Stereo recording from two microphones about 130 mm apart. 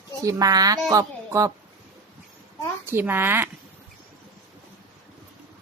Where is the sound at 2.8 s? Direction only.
15° right (ahead or behind).